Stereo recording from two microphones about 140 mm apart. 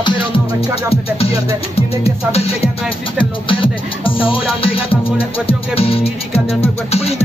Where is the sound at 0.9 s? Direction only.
45° left (ahead or behind).